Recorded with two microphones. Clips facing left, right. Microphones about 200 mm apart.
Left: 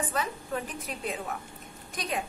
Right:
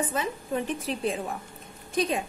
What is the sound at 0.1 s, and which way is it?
A woman's voice, 20° right (ahead or behind).